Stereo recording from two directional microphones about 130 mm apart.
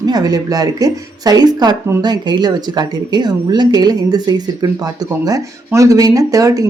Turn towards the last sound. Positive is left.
turn(degrees=-25)  # may be behind; listen again after turning